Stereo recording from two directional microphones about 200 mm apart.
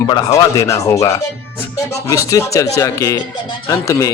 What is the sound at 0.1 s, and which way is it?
Speech, 20° left (ahead or behind).